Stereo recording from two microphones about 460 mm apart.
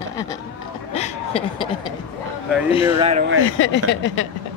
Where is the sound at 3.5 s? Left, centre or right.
Left.